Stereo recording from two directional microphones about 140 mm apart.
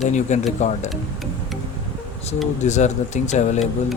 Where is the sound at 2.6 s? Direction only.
55° left (ahead or behind).